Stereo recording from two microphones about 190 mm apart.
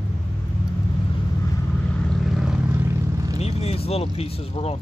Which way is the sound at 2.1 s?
Centre (ahead or behind).